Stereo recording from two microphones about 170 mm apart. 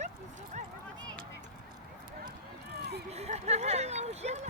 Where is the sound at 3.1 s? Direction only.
40° right (ahead or behind).